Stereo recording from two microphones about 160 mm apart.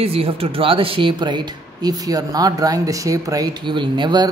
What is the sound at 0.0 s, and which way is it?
A woman's voice, 40° right (ahead or behind).